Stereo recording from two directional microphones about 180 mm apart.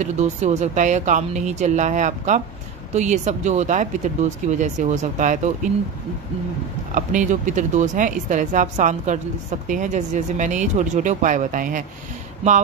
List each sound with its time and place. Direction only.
0.0 s speech: 40° right (ahead or behind)
6.9 s speech: 45° right (ahead or behind)